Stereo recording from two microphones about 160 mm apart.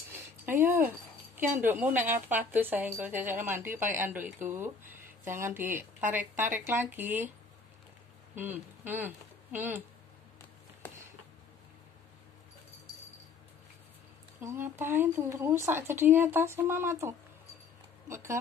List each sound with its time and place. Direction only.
0.1 s a sound: 15° right (ahead or behind)
2.1 s speech: 10° right (ahead or behind)
8.4 s speech: 10° right (ahead or behind)
14.4 s speech: 15° right (ahead or behind)